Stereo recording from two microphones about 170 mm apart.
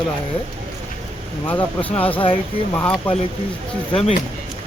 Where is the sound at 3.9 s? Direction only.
35° left (ahead or behind).